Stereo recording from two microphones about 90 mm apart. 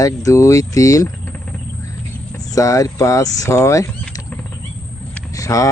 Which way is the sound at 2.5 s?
40° left (ahead or behind).